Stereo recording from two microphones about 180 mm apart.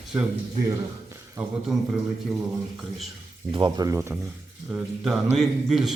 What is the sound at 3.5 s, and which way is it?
Speech, 25° right (ahead or behind).